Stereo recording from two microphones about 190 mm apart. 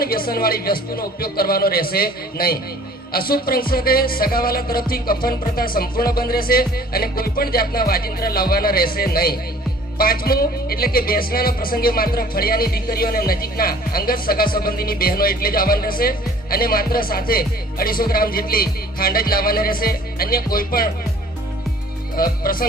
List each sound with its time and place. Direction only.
0.0 s music: 50° left (ahead or behind)
22.1 s music: 50° left (ahead or behind)